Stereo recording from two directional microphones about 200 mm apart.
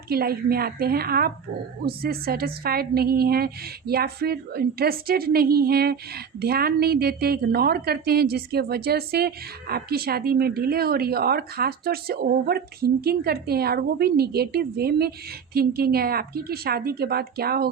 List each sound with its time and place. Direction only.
0.1 s a woman's voice: 50° right (ahead or behind)